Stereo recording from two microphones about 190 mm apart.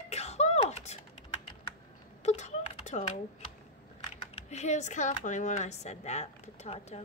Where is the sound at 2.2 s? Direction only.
35° left (ahead or behind).